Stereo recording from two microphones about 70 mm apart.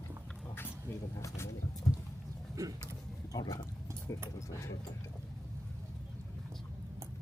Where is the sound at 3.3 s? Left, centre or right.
Left.